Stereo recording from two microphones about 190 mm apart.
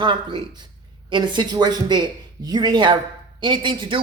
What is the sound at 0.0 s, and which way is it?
Speech, 25° right (ahead or behind).